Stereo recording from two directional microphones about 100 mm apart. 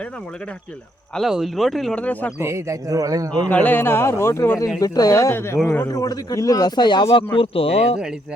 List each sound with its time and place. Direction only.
1.1 s speech: centre (ahead or behind)
2.0 s speech: 15° left (ahead or behind)
2.4 s a man's voice: 25° right (ahead or behind)
3.4 s a man's voice: 15° left (ahead or behind)
4.8 s speech: 40° left (ahead or behind)
5.3 s a man's voice: 25° left (ahead or behind)
5.9 s speech: 35° left (ahead or behind); by 7.3 s 55° left (ahead or behind)
7.3 s speech: 70° left (ahead or behind)